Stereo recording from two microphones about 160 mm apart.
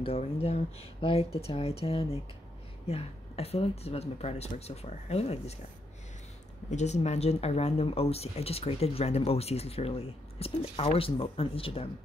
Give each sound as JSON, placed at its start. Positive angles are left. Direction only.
{"t": 0.0, "sound": "speech", "side_deg": 40}
{"t": 6.7, "sound": "speech", "side_deg": 45}